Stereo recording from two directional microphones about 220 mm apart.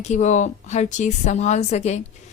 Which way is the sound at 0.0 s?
30° left (ahead or behind).